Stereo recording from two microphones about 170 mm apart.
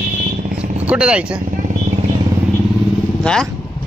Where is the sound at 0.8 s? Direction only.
5° right (ahead or behind).